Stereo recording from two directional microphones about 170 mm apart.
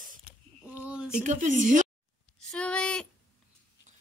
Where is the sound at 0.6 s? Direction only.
5° right (ahead or behind).